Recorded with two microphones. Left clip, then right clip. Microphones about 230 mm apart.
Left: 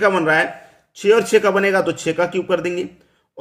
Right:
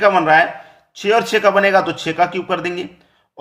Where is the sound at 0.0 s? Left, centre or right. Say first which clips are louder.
Right 4 dB; centre.